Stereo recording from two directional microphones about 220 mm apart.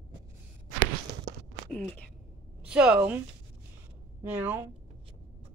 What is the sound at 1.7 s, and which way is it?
Speech, centre (ahead or behind).